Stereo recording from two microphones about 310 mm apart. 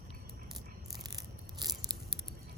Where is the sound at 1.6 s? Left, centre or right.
Centre.